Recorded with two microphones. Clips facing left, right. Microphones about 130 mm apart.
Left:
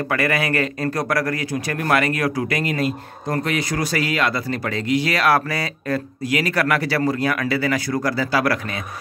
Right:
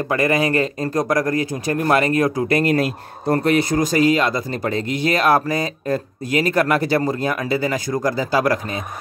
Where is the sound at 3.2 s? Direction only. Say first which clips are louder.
Right 6 dB; 40° right (ahead or behind).